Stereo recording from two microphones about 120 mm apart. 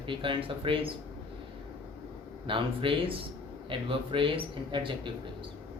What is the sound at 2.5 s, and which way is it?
Speech, 45° right (ahead or behind).